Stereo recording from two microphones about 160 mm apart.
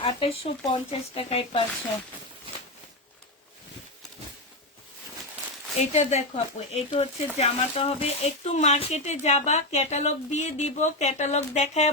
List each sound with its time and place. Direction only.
0.0 s speech: 35° left (ahead or behind)
5.8 s speech: 45° left (ahead or behind)